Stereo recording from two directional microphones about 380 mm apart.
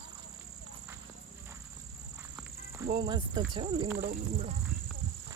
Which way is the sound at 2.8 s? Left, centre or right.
Centre.